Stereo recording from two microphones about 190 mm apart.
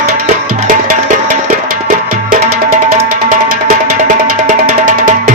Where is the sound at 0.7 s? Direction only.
45° right (ahead or behind).